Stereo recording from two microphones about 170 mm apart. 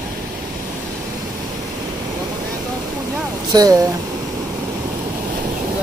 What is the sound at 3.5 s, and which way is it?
Speech, 20° right (ahead or behind).